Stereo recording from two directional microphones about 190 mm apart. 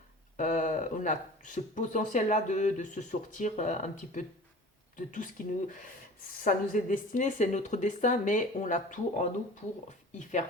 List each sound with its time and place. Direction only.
0.3 s speech: 40° left (ahead or behind)